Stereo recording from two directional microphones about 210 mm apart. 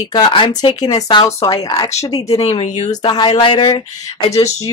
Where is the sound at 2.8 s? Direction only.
20° left (ahead or behind).